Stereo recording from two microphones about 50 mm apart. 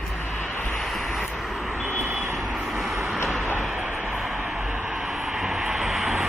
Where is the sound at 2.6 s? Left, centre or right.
Centre.